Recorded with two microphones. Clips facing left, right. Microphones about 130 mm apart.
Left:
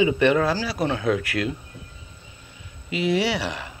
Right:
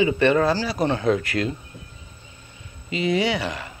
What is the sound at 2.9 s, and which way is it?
Speech, 10° left (ahead or behind).